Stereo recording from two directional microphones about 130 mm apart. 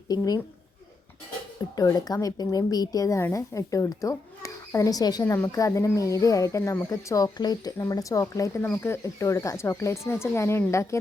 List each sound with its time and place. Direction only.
0.1 s speech: 30° left (ahead or behind)
1.7 s speech: 30° left (ahead or behind)